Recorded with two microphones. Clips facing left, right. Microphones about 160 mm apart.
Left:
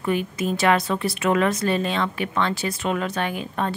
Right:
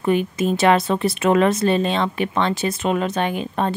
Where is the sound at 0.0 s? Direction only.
25° right (ahead or behind).